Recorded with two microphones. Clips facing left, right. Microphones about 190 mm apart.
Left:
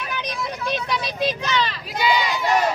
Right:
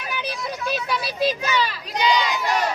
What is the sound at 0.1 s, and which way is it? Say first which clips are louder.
Vehicle: right 2 dB; 5° right (ahead or behind).